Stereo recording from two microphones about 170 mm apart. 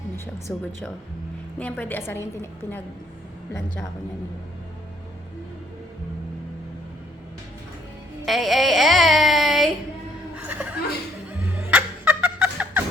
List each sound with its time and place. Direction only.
0.5 s a woman's voice: 5° left (ahead or behind)
8.2 s speech: centre (ahead or behind)
10.3 s chuckle: 10° right (ahead or behind)
11.3 s music: 10° right (ahead or behind)